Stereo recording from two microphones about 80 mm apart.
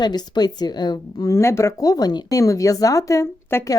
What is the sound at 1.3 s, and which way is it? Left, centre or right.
Speech, left.